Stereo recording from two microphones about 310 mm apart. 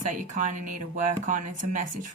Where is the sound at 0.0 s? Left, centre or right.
Right.